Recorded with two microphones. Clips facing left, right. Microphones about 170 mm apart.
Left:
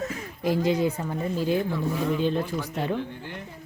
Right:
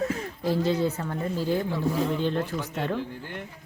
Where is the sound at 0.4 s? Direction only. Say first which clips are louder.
Left 1 dB; 15° left (ahead or behind).